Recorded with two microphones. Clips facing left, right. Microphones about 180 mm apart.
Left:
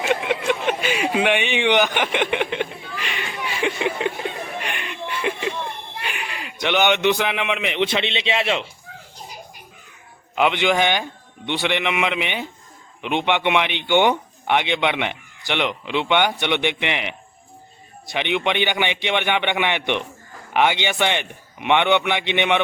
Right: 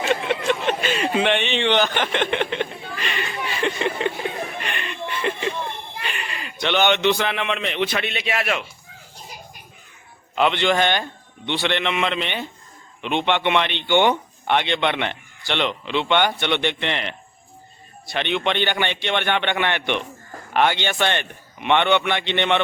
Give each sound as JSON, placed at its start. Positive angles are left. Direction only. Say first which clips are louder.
{"t": 0.0, "sound": "a sound", "louder": "even", "side_deg": 10}
{"t": 6.3, "sound": "speech", "louder": "left 1 dB", "side_deg": 10}
{"t": 10.3, "sound": "a man's voice", "louder": "even", "side_deg": 10}